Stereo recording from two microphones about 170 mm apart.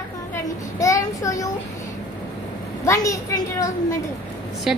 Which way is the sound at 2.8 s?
20° left (ahead or behind).